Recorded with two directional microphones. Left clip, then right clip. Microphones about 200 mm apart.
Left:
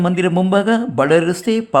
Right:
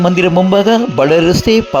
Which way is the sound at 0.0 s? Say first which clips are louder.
Right 7 dB; 20° right (ahead or behind).